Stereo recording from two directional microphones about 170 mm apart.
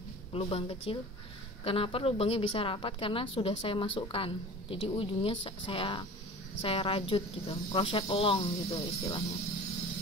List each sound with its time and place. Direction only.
0.3 s a woman's voice: 35° left (ahead or behind)